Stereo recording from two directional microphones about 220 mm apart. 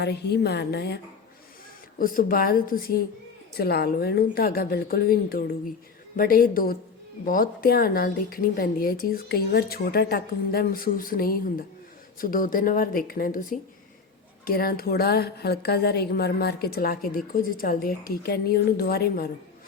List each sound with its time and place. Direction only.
0.0 s a woman's voice: 50° left (ahead or behind)